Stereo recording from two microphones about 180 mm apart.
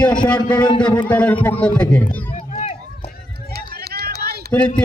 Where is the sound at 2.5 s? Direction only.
40° left (ahead or behind).